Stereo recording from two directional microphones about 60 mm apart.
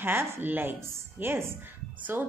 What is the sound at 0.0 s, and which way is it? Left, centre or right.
A woman's voice, right.